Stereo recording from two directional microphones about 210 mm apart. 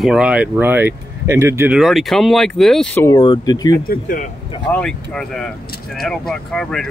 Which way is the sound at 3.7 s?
40° left (ahead or behind).